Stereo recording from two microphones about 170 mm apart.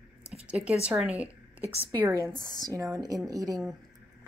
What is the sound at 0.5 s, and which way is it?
A woman's voice, 5° right (ahead or behind).